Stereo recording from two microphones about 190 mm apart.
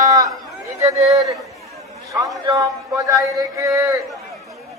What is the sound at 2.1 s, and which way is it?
A man's voice, 20° right (ahead or behind).